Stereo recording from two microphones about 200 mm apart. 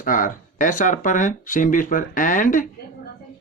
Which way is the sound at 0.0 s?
40° left (ahead or behind).